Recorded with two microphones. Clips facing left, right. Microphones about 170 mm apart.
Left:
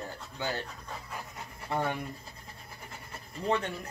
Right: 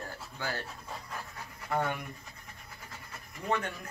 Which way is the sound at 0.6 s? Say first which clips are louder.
Even; 5° right (ahead or behind).